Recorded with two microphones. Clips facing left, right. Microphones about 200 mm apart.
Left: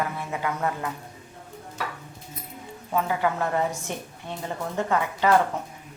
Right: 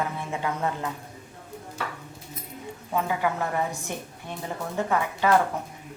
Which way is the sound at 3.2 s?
15° right (ahead or behind).